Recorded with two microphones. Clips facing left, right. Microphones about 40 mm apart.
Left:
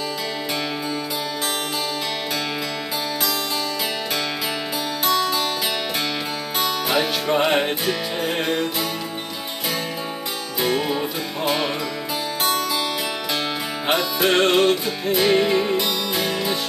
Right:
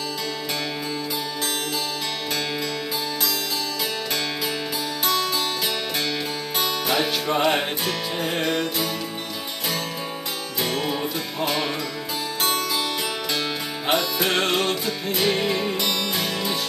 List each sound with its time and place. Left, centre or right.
5.0 s music: centre
6.6 s music: centre
10.6 s music: centre
13.8 s music: centre